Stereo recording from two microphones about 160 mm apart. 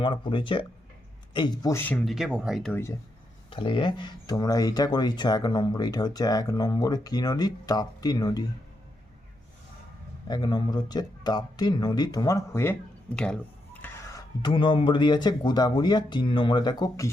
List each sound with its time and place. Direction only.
0.0 s speech: 30° left (ahead or behind)
1.7 s speech: 10° left (ahead or behind)
2.0 s speech: 5° right (ahead or behind)
3.5 s speech: 30° left (ahead or behind)
10.2 s speech: 25° left (ahead or behind)
13.1 s speech: 5° left (ahead or behind)
13.8 s speech: 20° left (ahead or behind)